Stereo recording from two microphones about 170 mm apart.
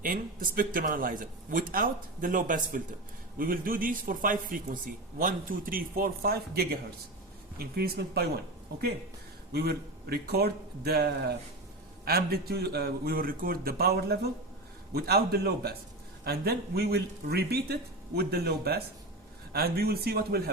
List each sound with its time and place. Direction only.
0.0 s a man's voice: 55° right (ahead or behind)
9.5 s speech: 70° right (ahead or behind)